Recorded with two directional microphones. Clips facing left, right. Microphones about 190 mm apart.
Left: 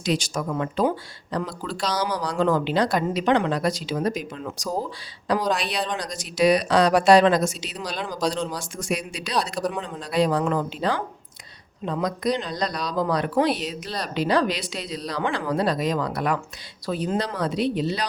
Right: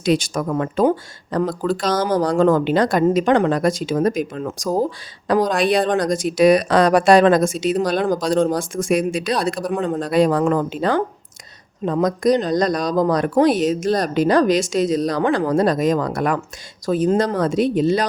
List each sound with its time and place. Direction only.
0.0 s speech: 55° right (ahead or behind)